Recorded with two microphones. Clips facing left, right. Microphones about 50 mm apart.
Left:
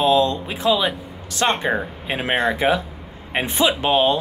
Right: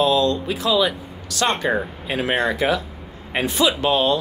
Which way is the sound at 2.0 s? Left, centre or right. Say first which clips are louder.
Left 1 dB; left.